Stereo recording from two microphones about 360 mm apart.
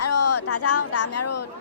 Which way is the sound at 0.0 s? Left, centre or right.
Left.